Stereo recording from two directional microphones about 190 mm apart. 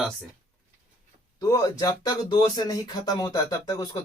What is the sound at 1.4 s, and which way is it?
Speech, 15° left (ahead or behind).